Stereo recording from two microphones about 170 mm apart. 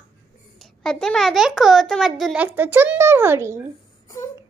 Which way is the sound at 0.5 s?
Centre (ahead or behind).